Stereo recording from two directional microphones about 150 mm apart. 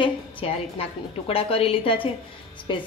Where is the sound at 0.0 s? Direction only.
35° left (ahead or behind).